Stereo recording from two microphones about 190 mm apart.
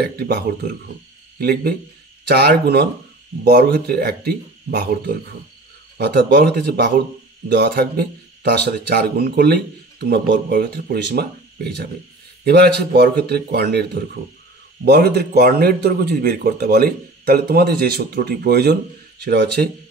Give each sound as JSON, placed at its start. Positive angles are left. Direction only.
{"t": 0.0, "sound": "a man's voice", "side_deg": -60}